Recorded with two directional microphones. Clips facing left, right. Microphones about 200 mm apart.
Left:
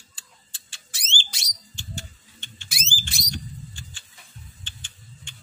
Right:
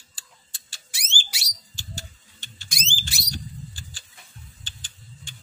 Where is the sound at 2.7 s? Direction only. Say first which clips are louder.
Right 1 dB; 5° left (ahead or behind).